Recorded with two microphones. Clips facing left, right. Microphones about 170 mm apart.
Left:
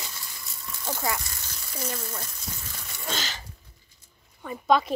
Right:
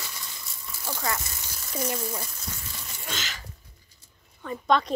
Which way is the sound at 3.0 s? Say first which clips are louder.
Left 4 dB; 35° left (ahead or behind).